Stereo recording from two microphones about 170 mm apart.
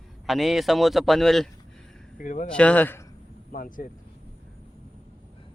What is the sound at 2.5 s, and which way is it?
Speech, 5° left (ahead or behind).